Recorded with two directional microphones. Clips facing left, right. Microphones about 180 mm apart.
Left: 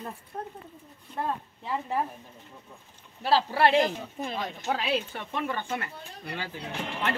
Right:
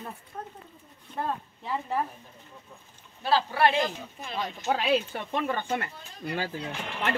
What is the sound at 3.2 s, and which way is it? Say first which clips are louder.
Speech: left 1 dB; 35° left (ahead or behind).